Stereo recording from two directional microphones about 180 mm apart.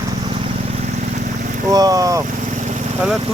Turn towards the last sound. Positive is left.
turn(degrees=-20)  # may be behind; listen again after turning